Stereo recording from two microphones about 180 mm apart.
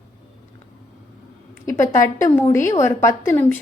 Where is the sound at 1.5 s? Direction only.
15° left (ahead or behind).